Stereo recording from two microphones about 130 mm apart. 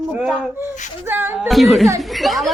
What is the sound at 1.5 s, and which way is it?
Speech, centre (ahead or behind).